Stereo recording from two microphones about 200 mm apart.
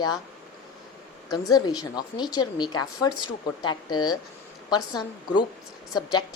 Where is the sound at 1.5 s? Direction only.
20° left (ahead or behind).